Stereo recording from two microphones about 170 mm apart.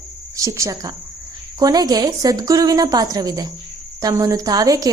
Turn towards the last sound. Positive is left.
turn(degrees=-20)  # may be behind; listen again after turning